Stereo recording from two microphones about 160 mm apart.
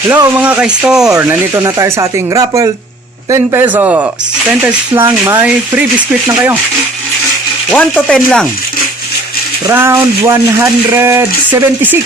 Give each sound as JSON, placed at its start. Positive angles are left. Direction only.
{"t": 0.1, "sound": "speech", "side_deg": -15}
{"t": 1.1, "sound": "speech", "side_deg": -15}
{"t": 5.0, "sound": "speech", "side_deg": -15}
{"t": 7.7, "sound": "mechanisms", "side_deg": 0}
{"t": 9.6, "sound": "speech", "side_deg": -15}